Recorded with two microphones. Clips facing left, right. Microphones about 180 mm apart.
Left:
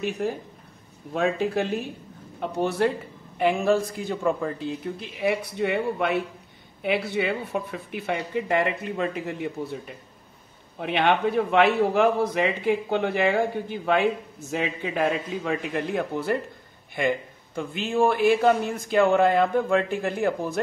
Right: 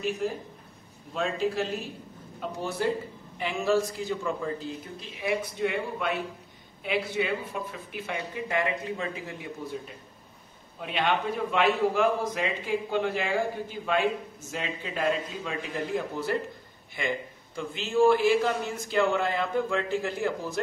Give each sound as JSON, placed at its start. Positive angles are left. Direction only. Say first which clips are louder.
{"t": 1.1, "sound": "a man's voice", "louder": "left 4 dB", "side_deg": 60}
{"t": 10.8, "sound": "a man's voice", "louder": "left 5 dB", "side_deg": 60}
{"t": 17.6, "sound": "a man's voice", "louder": "left 1 dB", "side_deg": 55}